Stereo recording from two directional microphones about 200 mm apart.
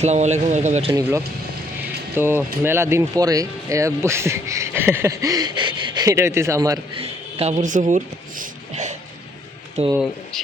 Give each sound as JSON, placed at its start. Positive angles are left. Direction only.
{"t": 0.0, "sound": "speech", "side_deg": -35}
{"t": 2.1, "sound": "speech", "side_deg": -10}
{"t": 7.0, "sound": "speech", "side_deg": -30}
{"t": 10.3, "sound": "speech", "side_deg": 5}